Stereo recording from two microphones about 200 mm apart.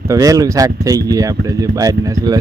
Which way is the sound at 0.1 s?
15° right (ahead or behind).